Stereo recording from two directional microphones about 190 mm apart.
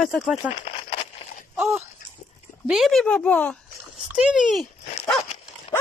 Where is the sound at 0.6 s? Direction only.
35° left (ahead or behind).